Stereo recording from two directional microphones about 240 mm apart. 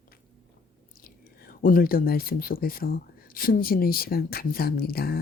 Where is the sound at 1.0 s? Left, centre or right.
Left.